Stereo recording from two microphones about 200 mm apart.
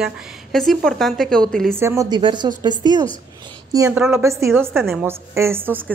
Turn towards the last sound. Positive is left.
turn(degrees=-10)  # may be behind; listen again after turning